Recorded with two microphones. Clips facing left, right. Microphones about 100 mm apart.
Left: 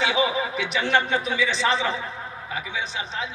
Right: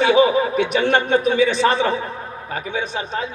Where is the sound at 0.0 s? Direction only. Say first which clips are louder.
Right 8 dB; 50° right (ahead or behind).